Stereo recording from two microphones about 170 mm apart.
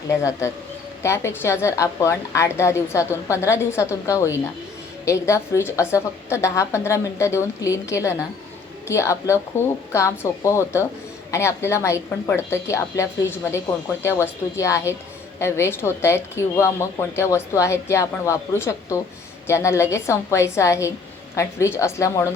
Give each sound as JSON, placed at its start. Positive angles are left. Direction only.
{"t": 0.2, "sound": "speech", "side_deg": 15}